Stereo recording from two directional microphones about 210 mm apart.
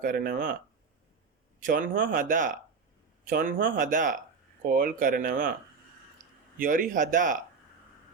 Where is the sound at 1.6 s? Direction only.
40° right (ahead or behind).